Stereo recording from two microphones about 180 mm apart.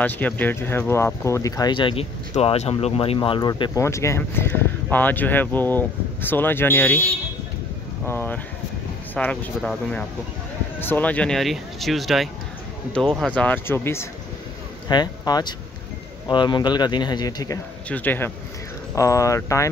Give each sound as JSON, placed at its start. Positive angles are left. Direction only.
{"t": 0.0, "sound": "speech", "side_deg": 10}
{"t": 8.1, "sound": "speech", "side_deg": 10}
{"t": 17.8, "sound": "speech", "side_deg": 10}